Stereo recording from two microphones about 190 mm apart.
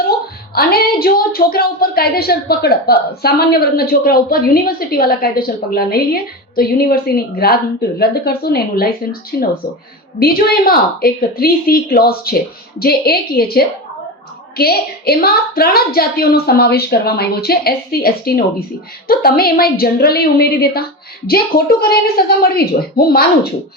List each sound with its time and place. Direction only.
0.5 s a woman's voice: 55° left (ahead or behind)